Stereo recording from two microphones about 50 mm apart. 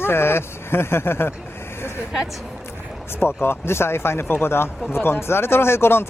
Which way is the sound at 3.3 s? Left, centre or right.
Left.